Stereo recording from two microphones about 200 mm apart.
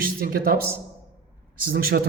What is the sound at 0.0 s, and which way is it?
Speech, 50° right (ahead or behind).